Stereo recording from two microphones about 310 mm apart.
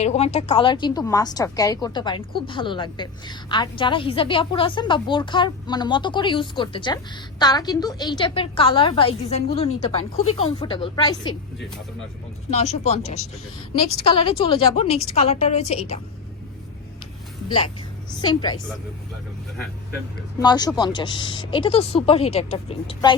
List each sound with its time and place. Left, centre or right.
0.0 s a woman's voice: left
12.5 s a woman's voice: left
18.1 s a woman's voice: centre
20.4 s a woman's voice: centre